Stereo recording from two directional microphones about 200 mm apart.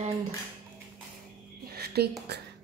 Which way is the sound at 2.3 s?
55° right (ahead or behind).